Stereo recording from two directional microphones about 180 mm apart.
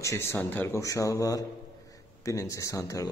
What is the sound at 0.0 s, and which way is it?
A man's voice, 15° left (ahead or behind).